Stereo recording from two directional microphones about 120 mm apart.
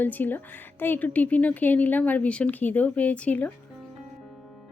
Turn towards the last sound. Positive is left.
turn(degrees=10)  # may be behind; listen again after turning